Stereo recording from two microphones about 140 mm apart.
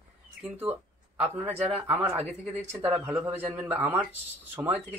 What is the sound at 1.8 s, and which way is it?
Speech, 10° right (ahead or behind).